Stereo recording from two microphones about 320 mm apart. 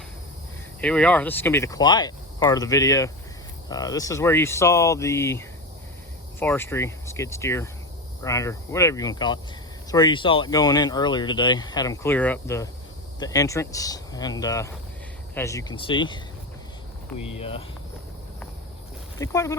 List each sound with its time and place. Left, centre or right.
0.8 s speech: centre
17.3 s speech: centre
19.2 s speech: centre